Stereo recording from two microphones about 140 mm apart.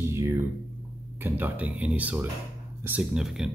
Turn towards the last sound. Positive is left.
turn(degrees=-5)  # may be behind; listen again after turning